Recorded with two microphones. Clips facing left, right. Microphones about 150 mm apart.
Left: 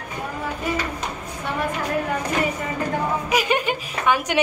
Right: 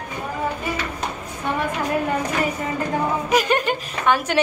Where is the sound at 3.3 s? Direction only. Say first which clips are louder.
Right 3 dB; 10° left (ahead or behind).